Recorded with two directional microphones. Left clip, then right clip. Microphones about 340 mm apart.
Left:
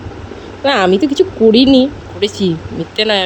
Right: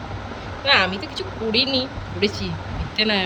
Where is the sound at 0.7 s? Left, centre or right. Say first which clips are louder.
Left 7 dB; centre.